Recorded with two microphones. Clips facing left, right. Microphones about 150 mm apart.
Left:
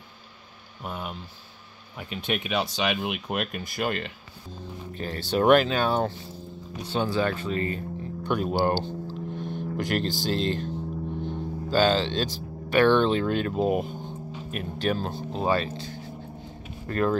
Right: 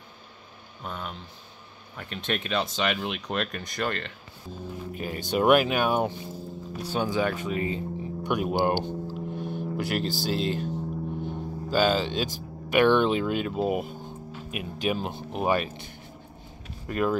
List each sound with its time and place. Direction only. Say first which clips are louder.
0.8 s speech: left 2 dB; 10° left (ahead or behind)
4.9 s speech: left 1 dB; 10° right (ahead or behind)
11.2 s a sound: left 1 dB; 5° right (ahead or behind)
12.4 s speech: even; 15° right (ahead or behind)